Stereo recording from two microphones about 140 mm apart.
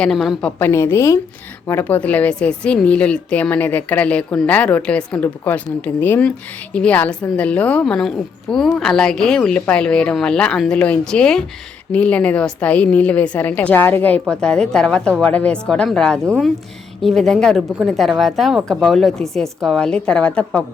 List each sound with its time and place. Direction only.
0.0 s speech: 5° left (ahead or behind)
0.6 s a woman's voice: 20° left (ahead or behind)